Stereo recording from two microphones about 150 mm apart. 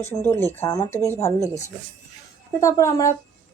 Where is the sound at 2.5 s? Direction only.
20° left (ahead or behind).